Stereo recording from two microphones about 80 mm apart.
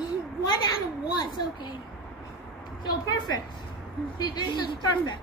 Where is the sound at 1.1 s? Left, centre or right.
Left.